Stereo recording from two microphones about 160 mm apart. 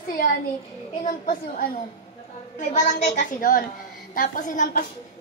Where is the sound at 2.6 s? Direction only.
50° left (ahead or behind).